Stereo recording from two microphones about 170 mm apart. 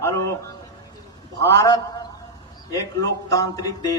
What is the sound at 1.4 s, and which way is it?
A man's voice, 20° left (ahead or behind).